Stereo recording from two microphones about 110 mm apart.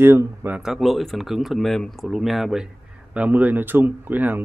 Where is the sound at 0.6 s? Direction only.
5° right (ahead or behind).